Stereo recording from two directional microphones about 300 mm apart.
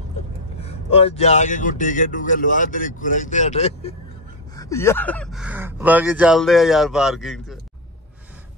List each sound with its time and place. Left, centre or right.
0.6 s speech: centre
4.6 s speech: centre